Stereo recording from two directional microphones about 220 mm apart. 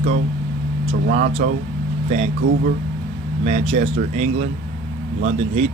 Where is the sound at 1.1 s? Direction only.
30° right (ahead or behind).